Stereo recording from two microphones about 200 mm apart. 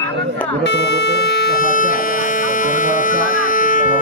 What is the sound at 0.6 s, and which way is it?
Speech, 60° left (ahead or behind).